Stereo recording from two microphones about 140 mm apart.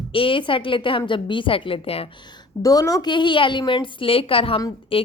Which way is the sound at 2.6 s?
25° left (ahead or behind).